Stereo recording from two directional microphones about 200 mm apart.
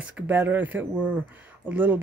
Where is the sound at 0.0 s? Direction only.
5° right (ahead or behind).